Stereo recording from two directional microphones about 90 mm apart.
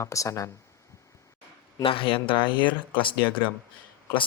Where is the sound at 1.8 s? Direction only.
90° left; by 3.1 s 65° left (ahead or behind).